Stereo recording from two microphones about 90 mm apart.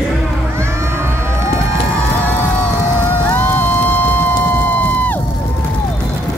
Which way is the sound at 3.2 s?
20° left (ahead or behind).